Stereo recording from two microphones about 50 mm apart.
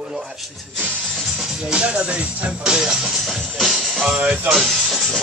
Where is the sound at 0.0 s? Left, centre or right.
Centre.